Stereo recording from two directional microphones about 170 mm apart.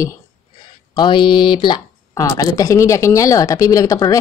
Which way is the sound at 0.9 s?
25° left (ahead or behind).